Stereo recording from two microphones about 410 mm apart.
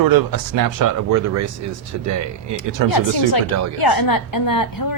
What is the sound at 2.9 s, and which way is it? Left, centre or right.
Speech, left.